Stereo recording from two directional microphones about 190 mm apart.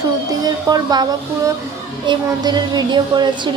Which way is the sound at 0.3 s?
20° right (ahead or behind).